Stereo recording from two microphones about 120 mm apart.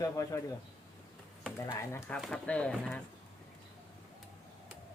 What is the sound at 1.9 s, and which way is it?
Speech, 20° left (ahead or behind).